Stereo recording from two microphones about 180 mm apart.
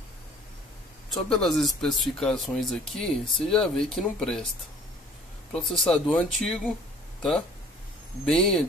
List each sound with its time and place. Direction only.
1.1 s speech: centre (ahead or behind)
5.5 s speech: 5° left (ahead or behind)